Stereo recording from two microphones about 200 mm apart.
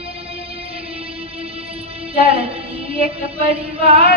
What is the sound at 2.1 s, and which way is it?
Music, 30° right (ahead or behind).